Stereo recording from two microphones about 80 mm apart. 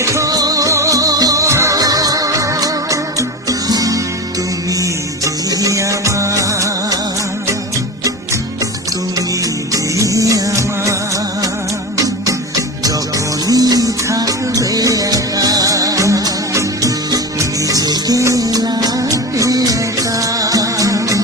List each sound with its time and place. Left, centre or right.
0.0 s music: right
9.7 s music: right
11.9 s music: right
13.5 s music: right